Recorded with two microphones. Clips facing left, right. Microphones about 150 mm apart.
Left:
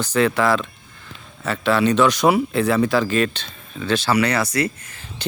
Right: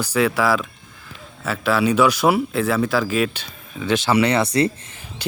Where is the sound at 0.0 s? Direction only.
5° right (ahead or behind); by 4.7 s 30° right (ahead or behind).